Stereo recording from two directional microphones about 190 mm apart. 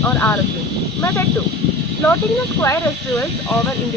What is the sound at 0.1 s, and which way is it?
Speech, 10° left (ahead or behind).